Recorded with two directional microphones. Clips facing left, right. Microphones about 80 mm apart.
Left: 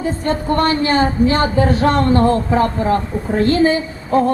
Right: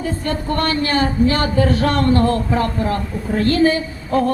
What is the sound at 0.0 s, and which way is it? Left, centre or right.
Speech, left.